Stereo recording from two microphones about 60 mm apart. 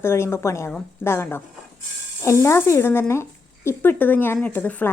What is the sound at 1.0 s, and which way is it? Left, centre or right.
Speech, left.